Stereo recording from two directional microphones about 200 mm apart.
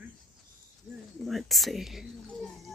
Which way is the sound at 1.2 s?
Centre (ahead or behind).